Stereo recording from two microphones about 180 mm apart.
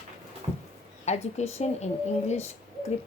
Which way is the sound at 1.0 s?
40° left (ahead or behind).